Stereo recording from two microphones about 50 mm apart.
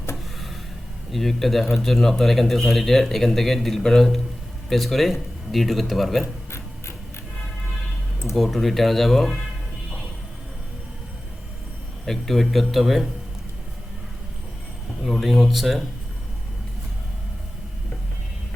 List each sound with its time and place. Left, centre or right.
1.1 s speech: centre
6.2 s music: left
8.4 s speech: centre
12.0 s speech: centre
15.0 s speech: centre